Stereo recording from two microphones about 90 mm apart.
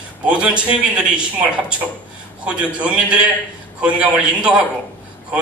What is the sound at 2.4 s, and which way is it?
A man's voice, 15° right (ahead or behind).